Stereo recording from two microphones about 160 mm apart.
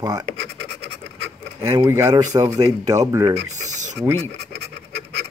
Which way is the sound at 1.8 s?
15° right (ahead or behind).